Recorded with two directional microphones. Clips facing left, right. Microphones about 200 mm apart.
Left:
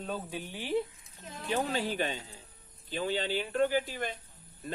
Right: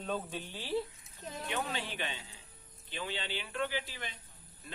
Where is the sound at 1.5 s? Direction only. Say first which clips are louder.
Left 8 dB; 35° left (ahead or behind).